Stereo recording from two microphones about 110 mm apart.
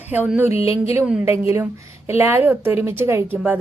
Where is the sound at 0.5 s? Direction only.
65° left (ahead or behind).